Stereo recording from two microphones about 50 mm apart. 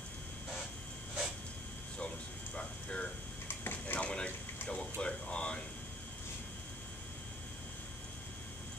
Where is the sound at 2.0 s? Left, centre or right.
Left.